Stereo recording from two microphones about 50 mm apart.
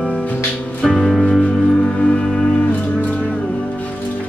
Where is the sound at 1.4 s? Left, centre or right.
Centre.